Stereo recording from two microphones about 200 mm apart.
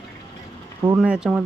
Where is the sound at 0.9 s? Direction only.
5° right (ahead or behind).